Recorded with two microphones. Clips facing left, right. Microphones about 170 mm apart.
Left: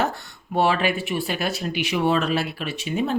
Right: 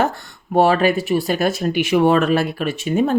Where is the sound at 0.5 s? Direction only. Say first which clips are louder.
Right 6 dB; 45° right (ahead or behind).